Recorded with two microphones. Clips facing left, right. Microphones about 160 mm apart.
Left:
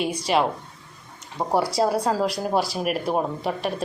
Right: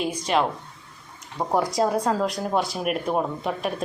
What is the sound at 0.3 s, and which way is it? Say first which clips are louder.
A woman's voice: left 1 dB; 5° left (ahead or behind).